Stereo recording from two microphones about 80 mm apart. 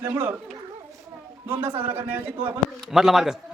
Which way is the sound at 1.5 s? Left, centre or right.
Right.